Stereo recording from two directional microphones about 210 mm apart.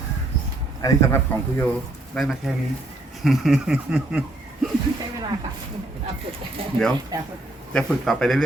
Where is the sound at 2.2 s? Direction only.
Centre (ahead or behind).